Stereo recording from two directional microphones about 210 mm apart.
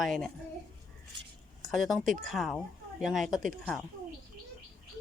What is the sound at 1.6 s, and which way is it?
Speech, centre (ahead or behind).